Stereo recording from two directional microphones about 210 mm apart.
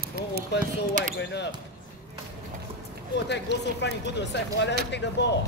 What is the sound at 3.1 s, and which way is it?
Speech, 55° left (ahead or behind).